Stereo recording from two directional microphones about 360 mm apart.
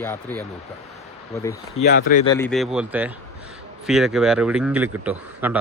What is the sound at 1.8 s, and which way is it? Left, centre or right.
Speech, left.